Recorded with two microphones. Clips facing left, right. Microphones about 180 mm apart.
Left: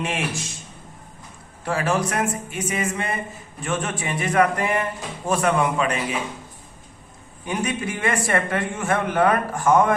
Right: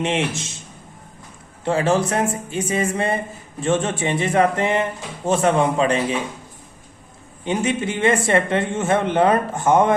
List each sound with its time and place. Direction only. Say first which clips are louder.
0.0 s speech: right 5 dB; 25° right (ahead or behind)
1.6 s speech: right 4 dB; 25° right (ahead or behind)
7.4 s speech: right 4 dB; 25° right (ahead or behind)